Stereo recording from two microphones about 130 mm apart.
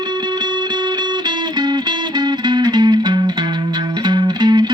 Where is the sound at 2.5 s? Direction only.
35° right (ahead or behind).